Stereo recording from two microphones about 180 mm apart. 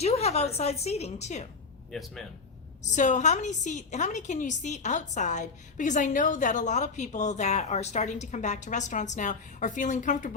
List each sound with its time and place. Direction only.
0.0 s a woman's voice: 35° left (ahead or behind)
1.9 s speech: centre (ahead or behind)
2.8 s a woman's voice: 40° left (ahead or behind)